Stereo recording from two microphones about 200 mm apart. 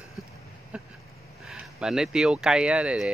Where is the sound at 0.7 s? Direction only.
5° right (ahead or behind).